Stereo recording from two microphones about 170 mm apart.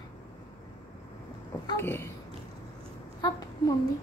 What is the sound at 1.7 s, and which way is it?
Speech, 15° left (ahead or behind).